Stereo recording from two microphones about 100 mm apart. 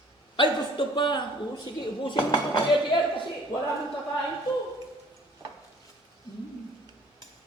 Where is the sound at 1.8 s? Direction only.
55° left (ahead or behind).